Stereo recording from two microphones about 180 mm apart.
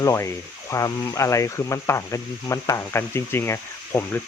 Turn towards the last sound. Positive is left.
turn(degrees=10)  # may be behind; listen again after turning